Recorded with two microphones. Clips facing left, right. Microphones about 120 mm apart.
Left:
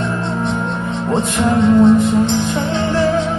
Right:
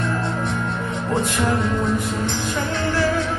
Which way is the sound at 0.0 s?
25° left (ahead or behind).